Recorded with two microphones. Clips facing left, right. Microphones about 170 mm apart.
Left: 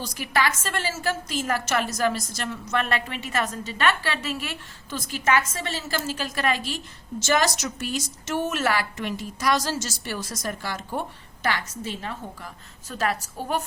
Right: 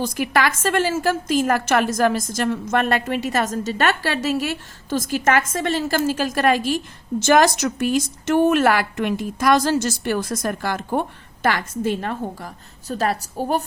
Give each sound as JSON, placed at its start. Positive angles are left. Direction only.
{"t": 0.0, "sound": "a woman's voice", "side_deg": -50}
{"t": 12.9, "sound": "a woman's voice", "side_deg": -35}